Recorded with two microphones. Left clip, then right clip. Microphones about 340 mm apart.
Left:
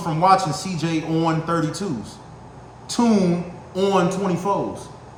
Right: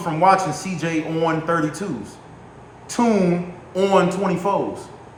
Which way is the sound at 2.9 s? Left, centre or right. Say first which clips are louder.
Right 1 dB; centre.